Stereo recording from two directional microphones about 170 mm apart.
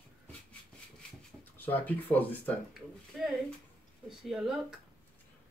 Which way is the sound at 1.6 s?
10° left (ahead or behind).